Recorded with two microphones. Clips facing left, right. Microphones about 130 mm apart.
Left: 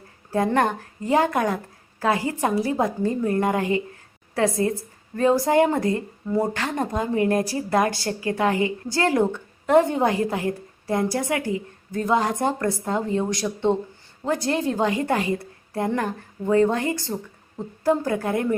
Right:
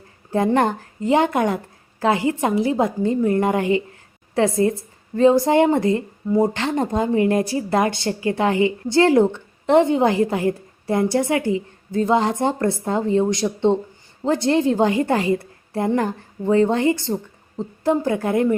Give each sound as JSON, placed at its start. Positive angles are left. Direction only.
{"t": 0.3, "sound": "a woman's voice", "side_deg": -25}